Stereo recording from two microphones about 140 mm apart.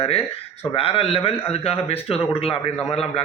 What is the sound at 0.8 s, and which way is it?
A man's voice, 40° left (ahead or behind).